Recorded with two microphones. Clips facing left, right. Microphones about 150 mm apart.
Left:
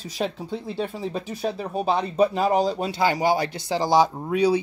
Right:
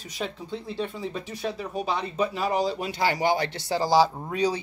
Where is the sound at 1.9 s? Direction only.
45° left (ahead or behind).